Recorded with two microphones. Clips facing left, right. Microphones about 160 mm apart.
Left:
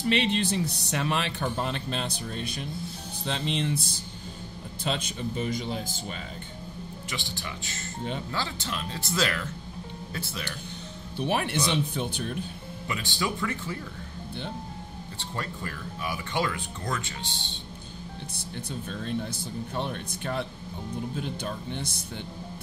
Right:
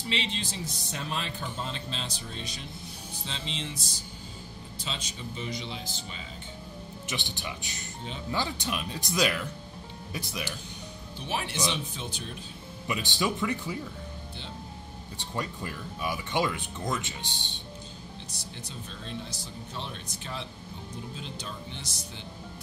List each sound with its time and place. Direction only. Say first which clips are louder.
0.0 s speech: left 8 dB; 60° left (ahead or behind)
7.1 s speech: right 1 dB; 20° right (ahead or behind)
11.1 s speech: left 6 dB; 55° left (ahead or behind)
12.8 s speech: right 1 dB; 20° right (ahead or behind)
15.1 s speech: right 1 dB; 15° right (ahead or behind)
18.9 s speech: left 8 dB; 55° left (ahead or behind)